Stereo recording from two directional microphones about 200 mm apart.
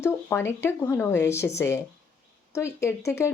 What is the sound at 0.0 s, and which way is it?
Speech, 10° left (ahead or behind).